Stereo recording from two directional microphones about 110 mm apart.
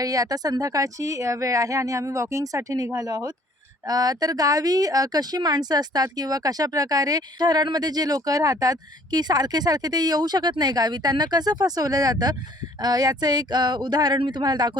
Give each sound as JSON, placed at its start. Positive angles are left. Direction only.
{"t": 0.0, "sound": "a woman's voice", "side_deg": -35}